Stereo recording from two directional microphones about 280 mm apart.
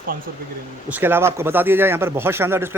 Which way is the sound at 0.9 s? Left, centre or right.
Centre.